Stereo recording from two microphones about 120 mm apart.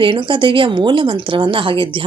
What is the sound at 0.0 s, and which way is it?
Speech, 45° right (ahead or behind).